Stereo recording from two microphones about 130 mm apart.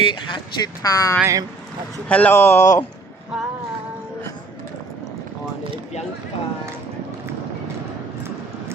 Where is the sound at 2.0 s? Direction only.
10° left (ahead or behind).